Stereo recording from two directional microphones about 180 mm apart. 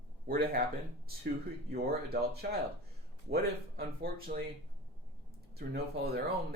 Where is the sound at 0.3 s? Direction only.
55° right (ahead or behind).